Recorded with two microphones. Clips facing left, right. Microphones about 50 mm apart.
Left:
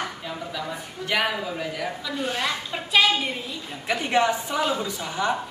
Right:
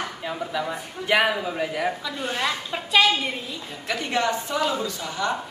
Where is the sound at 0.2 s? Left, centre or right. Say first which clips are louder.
Right 4 dB; centre.